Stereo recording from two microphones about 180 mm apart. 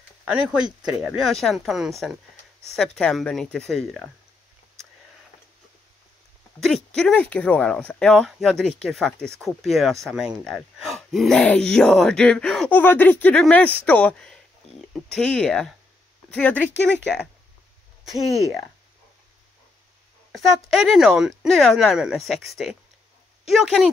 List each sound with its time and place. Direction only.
0.2 s speech: 5° right (ahead or behind)
6.6 s speech: 5° left (ahead or behind)
16.9 s speech: 70° left (ahead or behind)
20.7 s speech: centre (ahead or behind)